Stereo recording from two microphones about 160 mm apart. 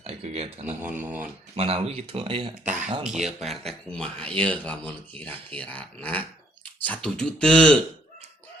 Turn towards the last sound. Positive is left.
turn(degrees=5)  # may be behind; listen again after turning